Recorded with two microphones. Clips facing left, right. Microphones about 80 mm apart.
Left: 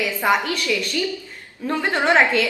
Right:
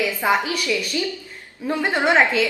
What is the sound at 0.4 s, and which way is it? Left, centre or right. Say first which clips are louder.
Speech: even; centre.